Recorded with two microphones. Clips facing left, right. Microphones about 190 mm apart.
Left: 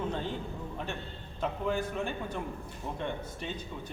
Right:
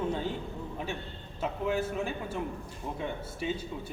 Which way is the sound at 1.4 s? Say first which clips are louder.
Right 1 dB; 5° right (ahead or behind).